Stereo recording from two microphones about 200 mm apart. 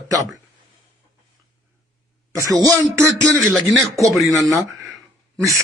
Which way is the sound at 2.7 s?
15° right (ahead or behind).